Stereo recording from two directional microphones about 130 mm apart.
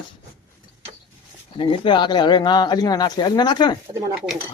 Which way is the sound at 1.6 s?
40° left (ahead or behind).